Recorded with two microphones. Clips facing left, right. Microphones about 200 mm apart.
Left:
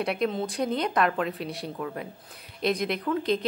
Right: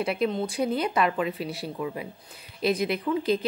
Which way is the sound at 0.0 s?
Centre (ahead or behind).